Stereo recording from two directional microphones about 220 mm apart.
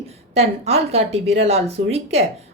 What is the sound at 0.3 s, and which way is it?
Speech, 30° right (ahead or behind).